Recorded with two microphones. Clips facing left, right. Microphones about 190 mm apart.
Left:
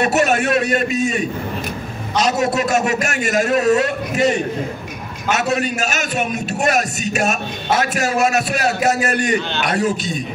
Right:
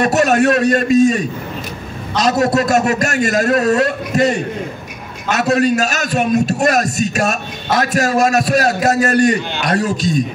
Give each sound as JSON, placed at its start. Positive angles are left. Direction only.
{"t": 0.0, "sound": "a man's voice", "side_deg": -40}